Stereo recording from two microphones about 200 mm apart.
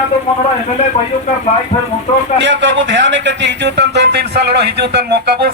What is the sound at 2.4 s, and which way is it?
A man's voice, 65° right (ahead or behind).